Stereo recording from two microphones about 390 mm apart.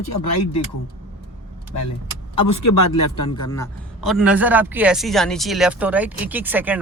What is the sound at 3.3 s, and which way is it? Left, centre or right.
A man's voice, centre.